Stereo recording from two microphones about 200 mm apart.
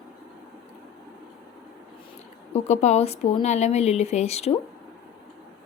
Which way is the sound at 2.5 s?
35° left (ahead or behind).